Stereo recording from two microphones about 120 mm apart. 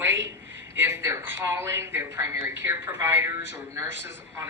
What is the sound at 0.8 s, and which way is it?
A woman's voice, 20° right (ahead or behind).